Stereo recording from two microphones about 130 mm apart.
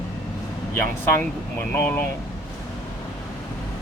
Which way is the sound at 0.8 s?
15° left (ahead or behind).